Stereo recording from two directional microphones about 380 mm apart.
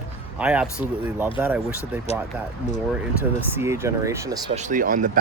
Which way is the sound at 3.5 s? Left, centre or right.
Centre.